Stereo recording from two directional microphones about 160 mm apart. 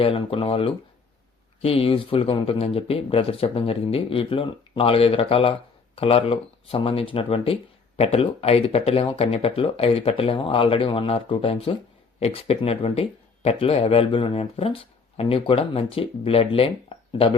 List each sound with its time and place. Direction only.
0.0 s speech: 35° left (ahead or behind)